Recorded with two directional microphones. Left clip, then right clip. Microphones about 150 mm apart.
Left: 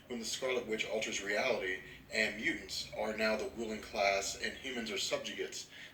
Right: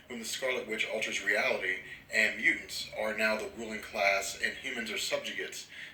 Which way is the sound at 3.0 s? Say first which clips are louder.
Right 4 dB; 15° right (ahead or behind).